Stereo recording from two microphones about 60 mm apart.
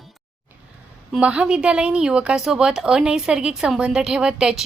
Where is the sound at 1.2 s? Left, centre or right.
Centre.